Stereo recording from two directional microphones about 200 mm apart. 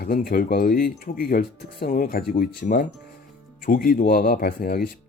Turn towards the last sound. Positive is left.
turn(degrees=50)  # may be behind; listen again after turning